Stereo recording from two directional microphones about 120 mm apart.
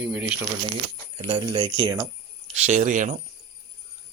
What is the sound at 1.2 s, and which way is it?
Speech, 40° right (ahead or behind).